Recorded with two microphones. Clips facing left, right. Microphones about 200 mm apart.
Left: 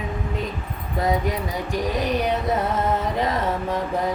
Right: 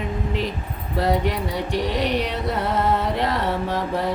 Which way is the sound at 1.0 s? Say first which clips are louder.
Right 1 dB; 70° right (ahead or behind).